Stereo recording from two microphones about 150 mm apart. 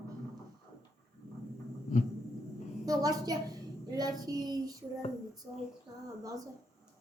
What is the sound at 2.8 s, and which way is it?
A woman's voice, 25° right (ahead or behind).